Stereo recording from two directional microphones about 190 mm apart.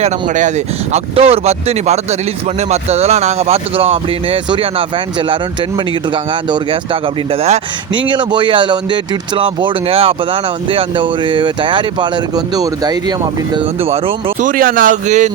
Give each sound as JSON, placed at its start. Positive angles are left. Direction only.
{"t": 0.0, "sound": "speech", "side_deg": -40}
{"t": 7.4, "sound": "speech", "side_deg": -30}
{"t": 14.4, "sound": "speech", "side_deg": -50}